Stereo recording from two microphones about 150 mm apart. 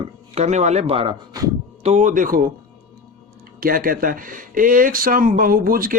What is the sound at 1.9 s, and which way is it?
Speech, 55° right (ahead or behind).